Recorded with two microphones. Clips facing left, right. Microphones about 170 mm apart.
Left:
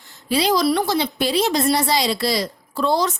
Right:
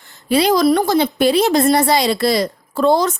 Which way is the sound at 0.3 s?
55° right (ahead or behind).